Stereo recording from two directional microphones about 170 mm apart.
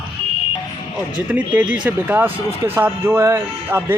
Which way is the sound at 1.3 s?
10° right (ahead or behind).